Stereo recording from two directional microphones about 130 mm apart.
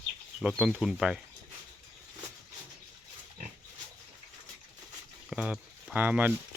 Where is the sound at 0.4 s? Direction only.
10° right (ahead or behind).